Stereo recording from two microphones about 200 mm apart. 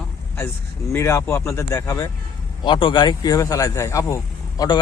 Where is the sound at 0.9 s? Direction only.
15° left (ahead or behind).